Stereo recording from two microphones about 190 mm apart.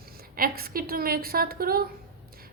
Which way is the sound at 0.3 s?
50° right (ahead or behind).